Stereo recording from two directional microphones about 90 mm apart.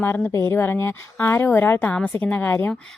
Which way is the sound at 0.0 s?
25° left (ahead or behind).